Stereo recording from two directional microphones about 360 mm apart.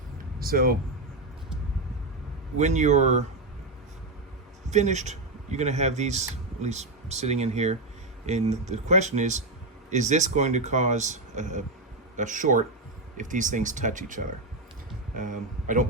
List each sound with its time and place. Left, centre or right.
0.3 s speech: right
2.6 s speech: centre
4.7 s speech: centre